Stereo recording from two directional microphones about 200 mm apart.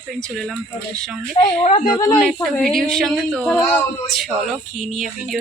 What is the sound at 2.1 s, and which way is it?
A woman's voice, centre (ahead or behind).